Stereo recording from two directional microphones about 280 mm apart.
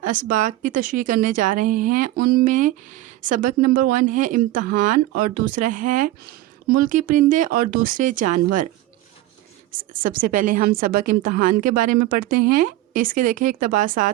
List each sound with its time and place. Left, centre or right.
0.0 s speech: right
10.0 s speech: right
13.0 s speech: right